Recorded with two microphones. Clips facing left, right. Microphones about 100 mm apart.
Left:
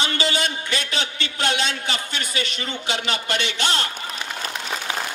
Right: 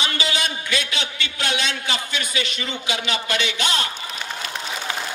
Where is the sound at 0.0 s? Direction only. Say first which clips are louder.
Left 2 dB; 35° left (ahead or behind).